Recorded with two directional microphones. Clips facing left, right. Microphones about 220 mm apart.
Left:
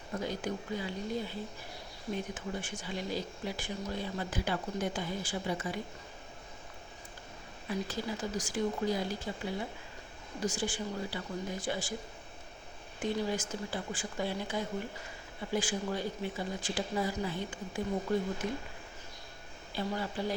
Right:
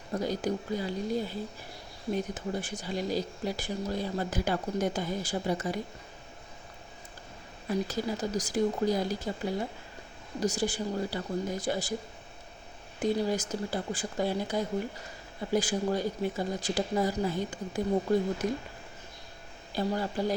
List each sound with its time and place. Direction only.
0.1 s speech: 40° right (ahead or behind)
7.7 s speech: 40° right (ahead or behind)
13.0 s speech: 40° right (ahead or behind)
19.7 s speech: 40° right (ahead or behind)